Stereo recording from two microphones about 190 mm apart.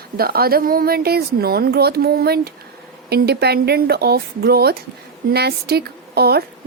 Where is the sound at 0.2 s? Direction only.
50° right (ahead or behind).